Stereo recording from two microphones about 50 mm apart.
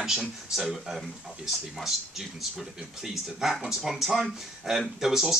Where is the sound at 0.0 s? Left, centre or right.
Centre.